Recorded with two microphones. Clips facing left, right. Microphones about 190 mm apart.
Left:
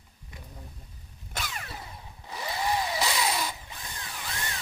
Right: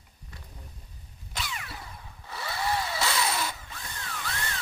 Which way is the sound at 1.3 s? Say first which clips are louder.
Even; 45° left (ahead or behind).